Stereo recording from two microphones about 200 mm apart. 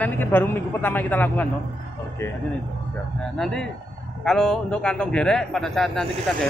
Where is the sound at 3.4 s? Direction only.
Centre (ahead or behind).